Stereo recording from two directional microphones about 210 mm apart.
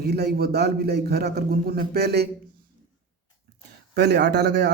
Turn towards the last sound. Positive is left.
turn(degrees=-50)  # may be behind; listen again after turning